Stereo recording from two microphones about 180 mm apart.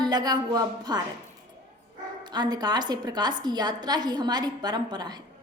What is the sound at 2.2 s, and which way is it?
A woman's voice, 25° right (ahead or behind).